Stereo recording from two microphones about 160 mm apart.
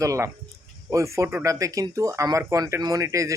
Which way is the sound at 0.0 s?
20° right (ahead or behind).